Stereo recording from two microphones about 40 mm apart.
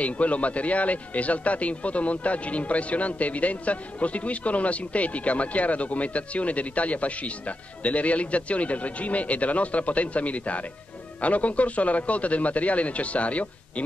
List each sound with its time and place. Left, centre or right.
0.0 s a man's voice: left